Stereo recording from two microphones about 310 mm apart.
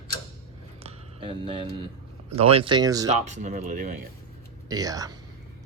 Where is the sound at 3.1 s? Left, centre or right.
Right.